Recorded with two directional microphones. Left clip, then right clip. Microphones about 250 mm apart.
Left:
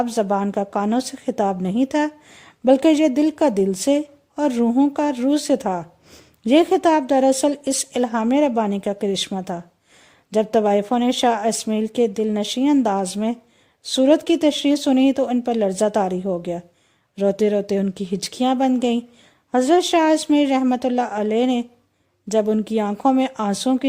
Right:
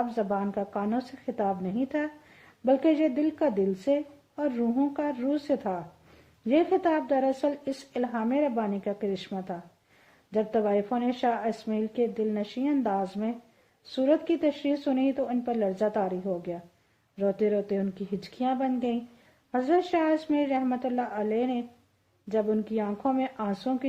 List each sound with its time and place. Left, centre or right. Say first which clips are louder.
0.0 s a woman's voice: left 8 dB; left